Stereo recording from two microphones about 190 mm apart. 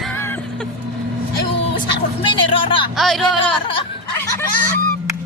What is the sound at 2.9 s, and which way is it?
Music, centre (ahead or behind).